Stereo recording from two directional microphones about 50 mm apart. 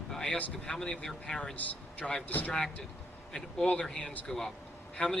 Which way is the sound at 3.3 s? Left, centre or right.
Centre.